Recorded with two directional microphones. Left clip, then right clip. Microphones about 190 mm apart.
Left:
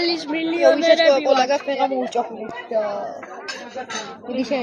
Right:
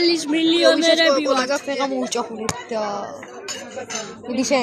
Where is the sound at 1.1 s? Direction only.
30° right (ahead or behind).